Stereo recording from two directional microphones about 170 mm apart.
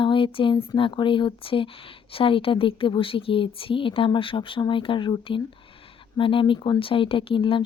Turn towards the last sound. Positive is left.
turn(degrees=30)  # may be behind; listen again after turning